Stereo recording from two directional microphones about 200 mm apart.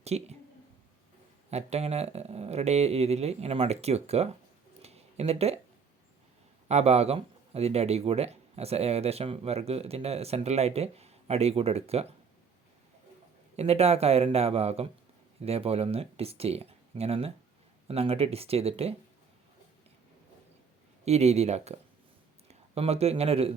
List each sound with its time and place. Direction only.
0.0 s speech: 30° right (ahead or behind)
1.5 s speech: 30° right (ahead or behind)
4.8 s a sound: 30° right (ahead or behind)
6.7 s speech: 30° right (ahead or behind)
13.6 s speech: 30° right (ahead or behind)
21.0 s speech: 35° right (ahead or behind)